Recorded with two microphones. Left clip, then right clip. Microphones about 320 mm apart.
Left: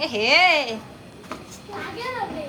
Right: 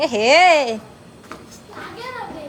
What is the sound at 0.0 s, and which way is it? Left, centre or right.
Speech, centre.